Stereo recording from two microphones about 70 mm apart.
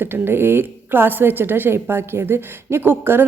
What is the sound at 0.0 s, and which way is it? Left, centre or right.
A woman's voice, right.